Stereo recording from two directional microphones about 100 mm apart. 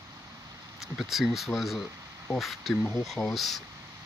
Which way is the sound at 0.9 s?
Centre (ahead or behind).